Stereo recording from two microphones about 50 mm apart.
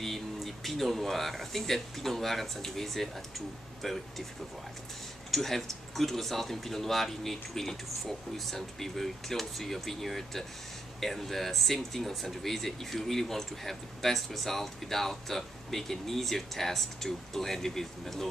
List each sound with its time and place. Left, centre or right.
0.0 s speech: centre
5.3 s speech: centre